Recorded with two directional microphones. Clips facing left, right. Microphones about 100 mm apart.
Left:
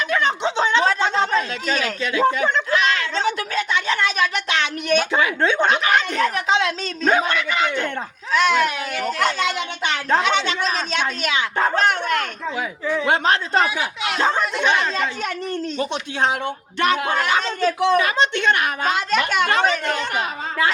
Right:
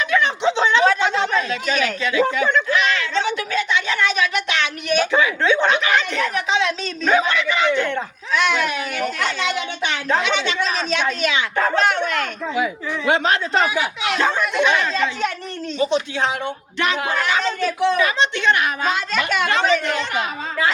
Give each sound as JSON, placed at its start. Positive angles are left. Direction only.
{"t": 0.1, "sound": "a woman's voice", "side_deg": 40}
{"t": 16.8, "sound": "a woman's voice", "side_deg": 50}